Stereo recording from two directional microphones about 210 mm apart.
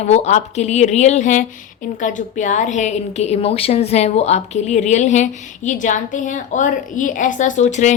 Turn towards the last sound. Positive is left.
turn(degrees=35)  # may be behind; listen again after turning